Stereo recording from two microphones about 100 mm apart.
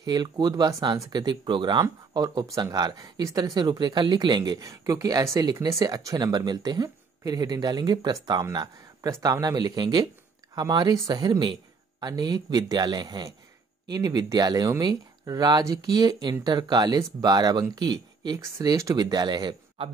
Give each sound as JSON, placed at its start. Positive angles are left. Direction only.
{"t": 0.0, "sound": "speech", "side_deg": -45}